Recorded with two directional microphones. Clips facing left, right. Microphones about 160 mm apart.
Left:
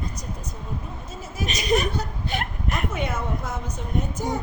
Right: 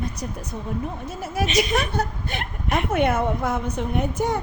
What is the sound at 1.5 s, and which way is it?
A woman's voice, 55° right (ahead or behind).